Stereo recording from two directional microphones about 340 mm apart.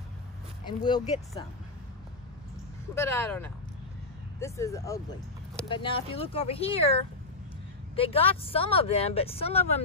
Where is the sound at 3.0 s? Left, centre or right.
Centre.